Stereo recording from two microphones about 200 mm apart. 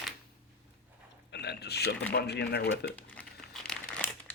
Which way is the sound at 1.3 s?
55° left (ahead or behind).